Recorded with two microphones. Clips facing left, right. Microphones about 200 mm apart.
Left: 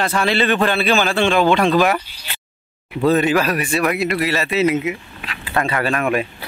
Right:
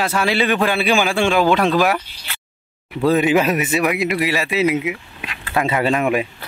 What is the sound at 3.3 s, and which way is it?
A man's voice, 20° right (ahead or behind).